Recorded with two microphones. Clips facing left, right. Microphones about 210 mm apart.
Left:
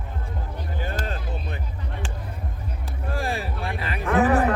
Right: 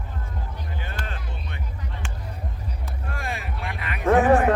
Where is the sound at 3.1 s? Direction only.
35° left (ahead or behind).